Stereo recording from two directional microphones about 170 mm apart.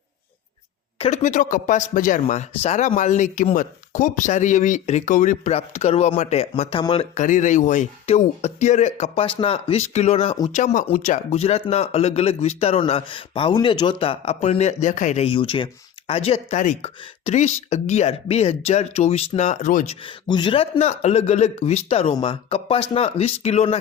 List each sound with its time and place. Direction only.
0.9 s speech: 40° left (ahead or behind)
7.2 s speech: 45° left (ahead or behind)
20.2 s speech: 25° left (ahead or behind)